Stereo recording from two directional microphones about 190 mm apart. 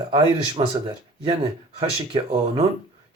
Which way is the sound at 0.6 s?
30° right (ahead or behind).